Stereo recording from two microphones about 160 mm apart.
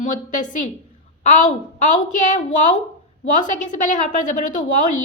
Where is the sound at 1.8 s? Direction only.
50° left (ahead or behind).